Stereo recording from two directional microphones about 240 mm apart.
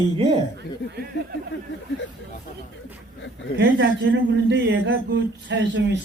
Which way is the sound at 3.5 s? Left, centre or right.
Right.